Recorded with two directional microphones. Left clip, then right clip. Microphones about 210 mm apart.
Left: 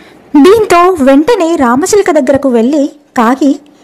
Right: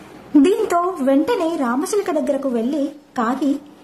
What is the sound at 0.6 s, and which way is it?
A woman's voice, 40° left (ahead or behind).